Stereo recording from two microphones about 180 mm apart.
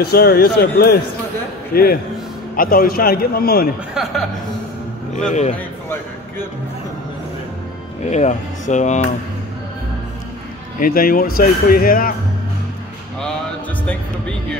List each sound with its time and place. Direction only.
0.0 s a man's voice: 60° left (ahead or behind)
3.9 s speech: centre (ahead or behind)
8.0 s speech: 40° left (ahead or behind)
10.8 s speech: 55° left (ahead or behind)
13.8 s music: 5° left (ahead or behind)